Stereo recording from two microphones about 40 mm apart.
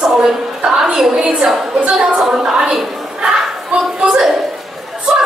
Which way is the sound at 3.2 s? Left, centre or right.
Right.